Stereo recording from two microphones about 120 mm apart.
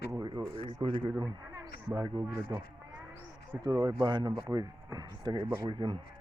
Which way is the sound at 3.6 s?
35° right (ahead or behind).